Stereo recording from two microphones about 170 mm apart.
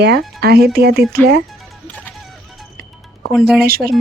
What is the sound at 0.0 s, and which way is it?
Speech, 70° right (ahead or behind).